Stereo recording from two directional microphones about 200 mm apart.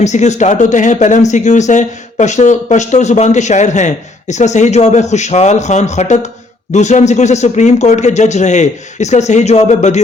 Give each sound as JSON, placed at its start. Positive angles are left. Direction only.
{"t": 0.0, "sound": "speech", "side_deg": 35}